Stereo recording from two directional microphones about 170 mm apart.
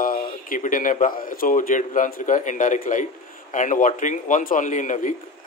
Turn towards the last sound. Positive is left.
turn(degrees=50)  # may be behind; listen again after turning